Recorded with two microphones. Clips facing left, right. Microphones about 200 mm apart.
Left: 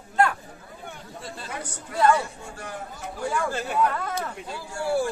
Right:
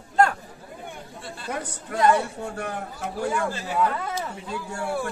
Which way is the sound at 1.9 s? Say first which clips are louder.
Right 1 dB; 55° right (ahead or behind).